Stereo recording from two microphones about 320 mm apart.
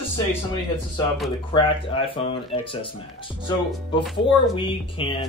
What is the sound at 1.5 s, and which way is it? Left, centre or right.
Speech, centre.